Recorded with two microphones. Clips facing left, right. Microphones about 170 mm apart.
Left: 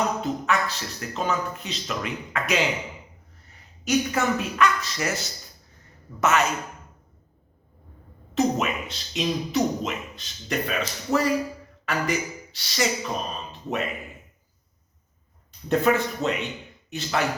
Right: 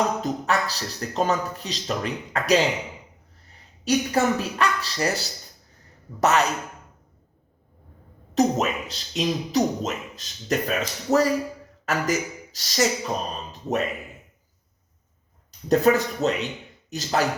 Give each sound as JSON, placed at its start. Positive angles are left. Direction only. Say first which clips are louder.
{"t": 0.2, "sound": "speech", "louder": "right 1 dB", "side_deg": -40}
{"t": 3.8, "sound": "speech", "louder": "right 2 dB", "side_deg": -35}
{"t": 8.4, "sound": "speech", "louder": "right 2 dB", "side_deg": -40}
{"t": 15.7, "sound": "speech", "louder": "right 3 dB", "side_deg": -40}